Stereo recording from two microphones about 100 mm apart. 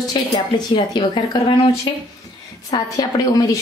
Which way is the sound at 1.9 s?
50° left (ahead or behind).